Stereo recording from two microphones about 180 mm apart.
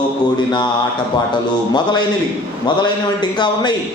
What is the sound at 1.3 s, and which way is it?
Speech, 25° left (ahead or behind).